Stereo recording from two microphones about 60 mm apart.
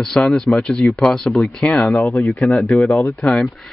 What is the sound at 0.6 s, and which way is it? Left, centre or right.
Speech, centre.